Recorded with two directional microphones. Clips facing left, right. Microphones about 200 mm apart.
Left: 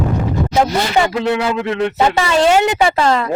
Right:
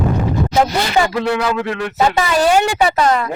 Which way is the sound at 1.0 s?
25° left (ahead or behind).